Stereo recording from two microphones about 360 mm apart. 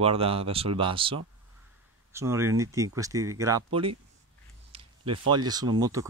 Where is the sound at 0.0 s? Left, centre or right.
Centre.